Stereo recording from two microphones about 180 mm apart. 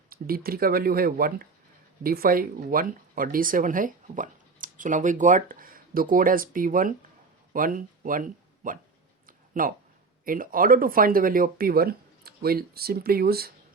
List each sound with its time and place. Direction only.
0.1 s speech: 55° right (ahead or behind)
9.2 s a sound: 50° right (ahead or behind)
10.2 s speech: 50° right (ahead or behind)